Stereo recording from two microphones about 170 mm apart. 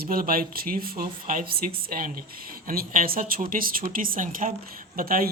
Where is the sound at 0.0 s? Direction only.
60° right (ahead or behind).